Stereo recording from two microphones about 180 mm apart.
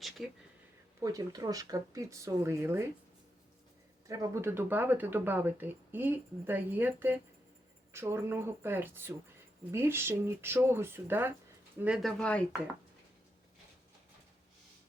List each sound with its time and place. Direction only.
0.2 s speech: centre (ahead or behind)
0.9 s speech: 20° right (ahead or behind)
4.1 s speech: 15° right (ahead or behind)
12.2 s speech: 5° left (ahead or behind)